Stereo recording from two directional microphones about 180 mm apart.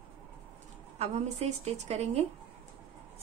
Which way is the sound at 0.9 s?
35° right (ahead or behind).